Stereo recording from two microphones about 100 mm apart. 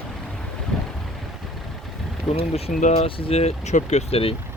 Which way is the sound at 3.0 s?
65° left (ahead or behind).